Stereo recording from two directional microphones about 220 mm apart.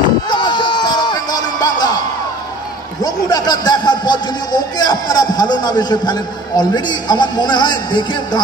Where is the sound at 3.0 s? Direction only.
15° left (ahead or behind).